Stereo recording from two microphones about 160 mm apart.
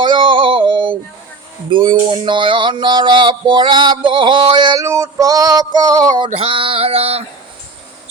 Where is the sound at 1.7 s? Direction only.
30° right (ahead or behind).